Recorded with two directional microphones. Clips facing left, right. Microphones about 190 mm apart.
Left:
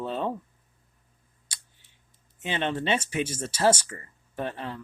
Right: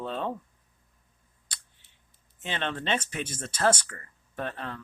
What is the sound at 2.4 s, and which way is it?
Speech, 10° left (ahead or behind).